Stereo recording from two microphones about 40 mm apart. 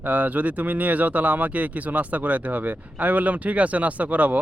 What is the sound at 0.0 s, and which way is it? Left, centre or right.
Speech, right.